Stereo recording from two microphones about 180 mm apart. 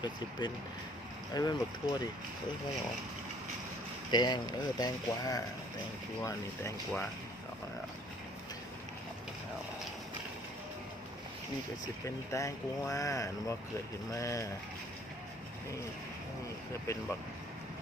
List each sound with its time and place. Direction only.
0.0 s speech: 25° left (ahead or behind)
4.1 s speech: 25° left (ahead or behind)
12.0 s speech: 15° left (ahead or behind)
16.8 s speech: 15° left (ahead or behind)